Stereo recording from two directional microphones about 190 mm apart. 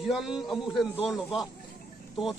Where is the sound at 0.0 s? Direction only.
Centre (ahead or behind).